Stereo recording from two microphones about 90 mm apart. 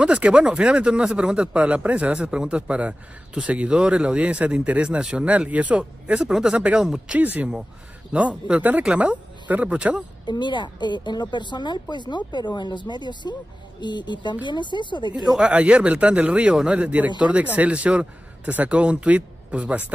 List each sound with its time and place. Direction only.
0.0 s speech: 10° right (ahead or behind)
7.2 s speech: 20° right (ahead or behind)
10.2 s a woman's voice: 55° left (ahead or behind)
15.2 s speech: 10° right (ahead or behind)